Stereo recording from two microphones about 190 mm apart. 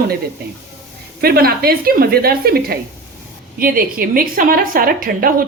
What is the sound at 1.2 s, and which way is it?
A woman's voice, 55° right (ahead or behind).